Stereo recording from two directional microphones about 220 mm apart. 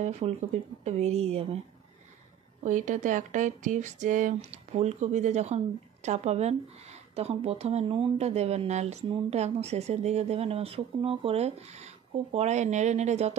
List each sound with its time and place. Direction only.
0.0 s speech: 30° right (ahead or behind)
2.6 s speech: 35° right (ahead or behind)